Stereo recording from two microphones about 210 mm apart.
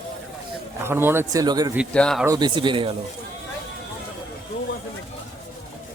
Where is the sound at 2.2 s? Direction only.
20° right (ahead or behind).